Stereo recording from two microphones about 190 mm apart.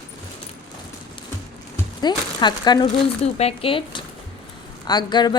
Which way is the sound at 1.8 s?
20° left (ahead or behind).